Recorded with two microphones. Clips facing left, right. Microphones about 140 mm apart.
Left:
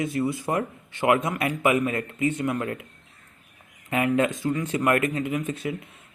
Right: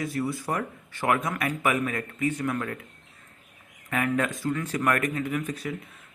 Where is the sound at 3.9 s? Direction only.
20° left (ahead or behind).